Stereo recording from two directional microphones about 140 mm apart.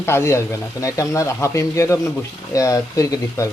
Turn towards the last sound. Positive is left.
turn(degrees=20)  # may be behind; listen again after turning